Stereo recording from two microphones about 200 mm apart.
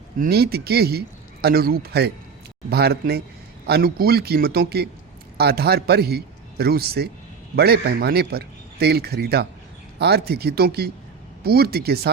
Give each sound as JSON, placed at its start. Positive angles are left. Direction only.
{"t": 0.2, "sound": "a man's voice", "side_deg": -50}